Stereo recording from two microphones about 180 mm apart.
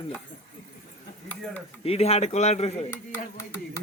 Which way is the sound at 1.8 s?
35° left (ahead or behind).